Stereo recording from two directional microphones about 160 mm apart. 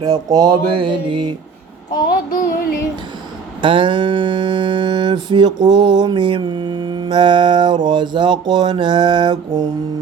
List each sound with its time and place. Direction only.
0.0 s mantra: 25° right (ahead or behind)
2.0 s child singing: 65° left (ahead or behind)
3.6 s mantra: 30° right (ahead or behind)